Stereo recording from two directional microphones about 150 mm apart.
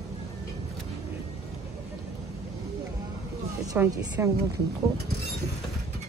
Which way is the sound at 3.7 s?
15° right (ahead or behind).